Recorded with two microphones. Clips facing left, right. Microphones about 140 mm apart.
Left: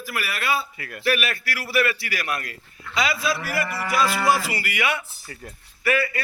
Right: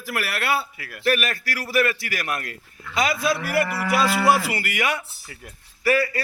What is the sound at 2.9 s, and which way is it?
Moo, 50° right (ahead or behind).